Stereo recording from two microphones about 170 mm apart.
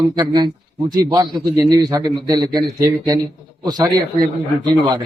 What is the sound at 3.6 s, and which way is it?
Speech, 25° right (ahead or behind).